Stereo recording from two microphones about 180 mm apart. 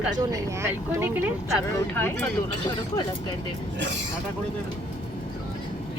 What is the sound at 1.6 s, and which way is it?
Speech, 15° left (ahead or behind).